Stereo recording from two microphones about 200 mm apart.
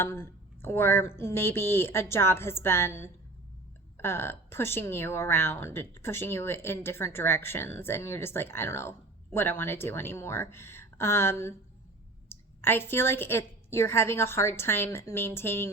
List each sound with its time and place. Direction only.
0.0 s a woman's voice: 10° left (ahead or behind)